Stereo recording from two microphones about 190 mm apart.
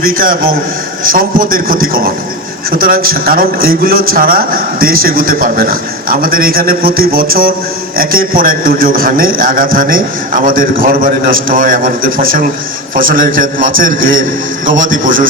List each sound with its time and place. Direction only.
0.0 s a man's voice: 50° right (ahead or behind)